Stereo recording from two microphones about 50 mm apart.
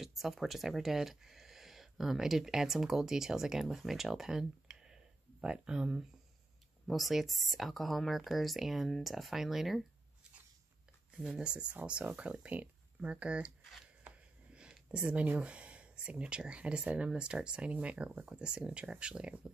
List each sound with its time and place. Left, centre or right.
0.0 s speech: centre
11.1 s speech: centre
14.5 s a sound: centre
15.4 s speech: right